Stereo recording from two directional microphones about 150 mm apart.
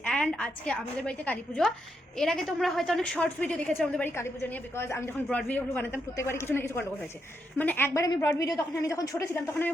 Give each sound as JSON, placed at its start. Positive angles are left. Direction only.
{"t": 0.0, "sound": "a woman's voice", "side_deg": 5}